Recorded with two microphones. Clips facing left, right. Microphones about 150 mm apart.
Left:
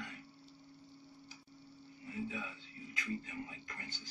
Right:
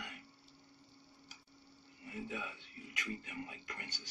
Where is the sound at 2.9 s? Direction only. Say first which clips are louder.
Left 3 dB; 85° right.